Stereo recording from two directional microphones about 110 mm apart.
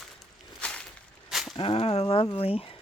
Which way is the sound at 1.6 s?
60° left (ahead or behind).